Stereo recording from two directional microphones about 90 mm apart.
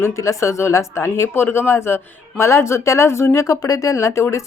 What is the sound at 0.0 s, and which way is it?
Speech, 35° left (ahead or behind).